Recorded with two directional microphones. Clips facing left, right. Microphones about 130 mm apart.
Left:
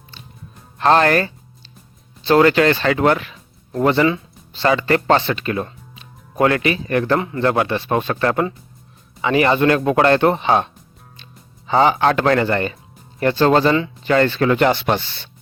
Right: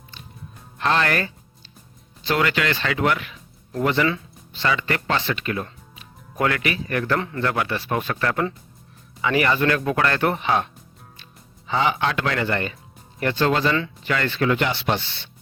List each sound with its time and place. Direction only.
0.8 s speech: 35° left (ahead or behind)
7.2 s speech: 15° left (ahead or behind)
7.4 s speech: 30° left (ahead or behind)
11.7 s speech: 40° left (ahead or behind)
13.7 s speech: 20° left (ahead or behind)
14.1 s speech: 35° left (ahead or behind)